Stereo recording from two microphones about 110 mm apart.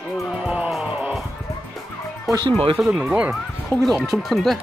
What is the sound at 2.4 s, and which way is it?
Speech, 50° right (ahead or behind).